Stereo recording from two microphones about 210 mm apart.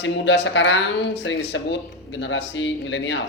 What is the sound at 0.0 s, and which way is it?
Speech, 60° left (ahead or behind).